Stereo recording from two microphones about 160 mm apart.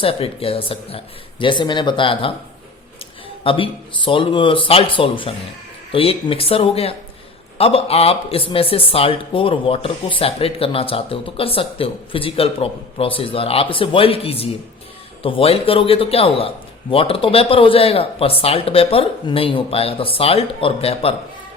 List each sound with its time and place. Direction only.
0.0 s speech: 35° left (ahead or behind)
3.4 s speech: 35° left (ahead or behind)